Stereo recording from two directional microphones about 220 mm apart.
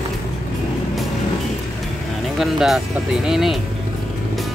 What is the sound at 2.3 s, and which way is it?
Speech, centre (ahead or behind).